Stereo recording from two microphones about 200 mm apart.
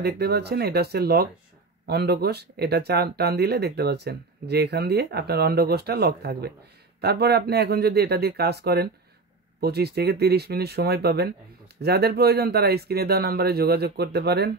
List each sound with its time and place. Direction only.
0.0 s speech: 55° right (ahead or behind)